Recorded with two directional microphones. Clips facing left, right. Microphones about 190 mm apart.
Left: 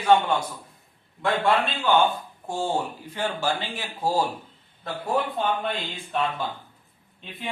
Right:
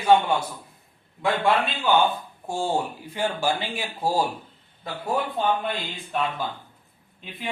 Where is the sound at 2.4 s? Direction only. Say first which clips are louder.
Right 1 dB; 10° right (ahead or behind).